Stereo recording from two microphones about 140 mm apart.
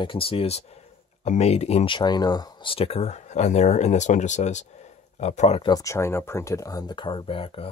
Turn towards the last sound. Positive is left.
turn(degrees=40)  # may be behind; listen again after turning